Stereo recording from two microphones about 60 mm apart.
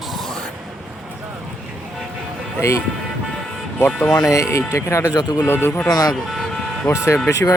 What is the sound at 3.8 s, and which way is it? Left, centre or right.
Speech, centre.